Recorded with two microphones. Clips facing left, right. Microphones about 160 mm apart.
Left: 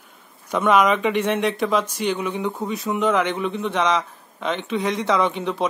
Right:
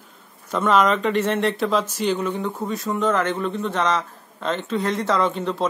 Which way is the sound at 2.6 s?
15° left (ahead or behind).